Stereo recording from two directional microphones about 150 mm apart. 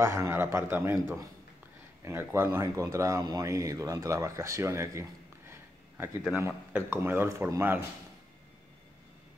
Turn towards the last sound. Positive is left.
turn(degrees=-15)  # may be behind; listen again after turning